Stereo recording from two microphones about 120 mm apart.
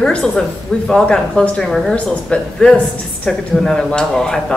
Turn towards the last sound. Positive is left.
turn(degrees=5)  # may be behind; listen again after turning